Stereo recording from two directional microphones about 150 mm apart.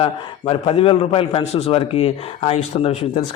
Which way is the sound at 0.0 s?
40° left (ahead or behind).